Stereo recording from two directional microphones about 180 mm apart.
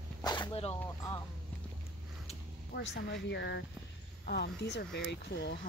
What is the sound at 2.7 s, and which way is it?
Speech, 70° left (ahead or behind).